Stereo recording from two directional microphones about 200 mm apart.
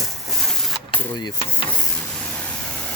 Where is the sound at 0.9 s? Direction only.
25° left (ahead or behind).